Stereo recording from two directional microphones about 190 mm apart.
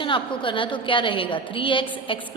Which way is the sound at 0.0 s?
25° left (ahead or behind).